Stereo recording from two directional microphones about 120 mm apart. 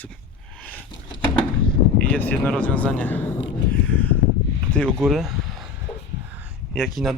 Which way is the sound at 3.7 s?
10° left (ahead or behind).